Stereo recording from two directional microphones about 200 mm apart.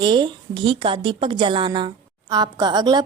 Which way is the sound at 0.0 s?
25° right (ahead or behind).